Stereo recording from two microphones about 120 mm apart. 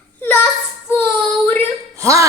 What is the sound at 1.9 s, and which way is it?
Speech, 25° right (ahead or behind).